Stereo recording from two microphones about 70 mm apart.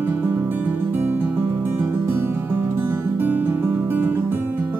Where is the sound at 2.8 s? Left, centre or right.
Right.